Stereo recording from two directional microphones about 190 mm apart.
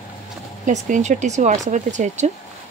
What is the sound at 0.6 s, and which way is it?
Speech, 40° right (ahead or behind).